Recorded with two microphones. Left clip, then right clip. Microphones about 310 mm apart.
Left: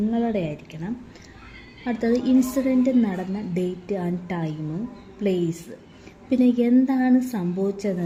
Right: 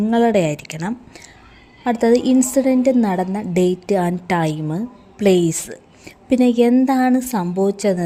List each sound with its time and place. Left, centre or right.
0.1 s a woman's voice: right